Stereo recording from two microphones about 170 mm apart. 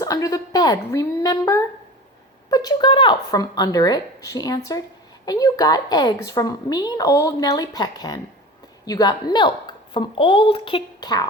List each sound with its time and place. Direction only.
0.0 s a woman's voice: 20° left (ahead or behind)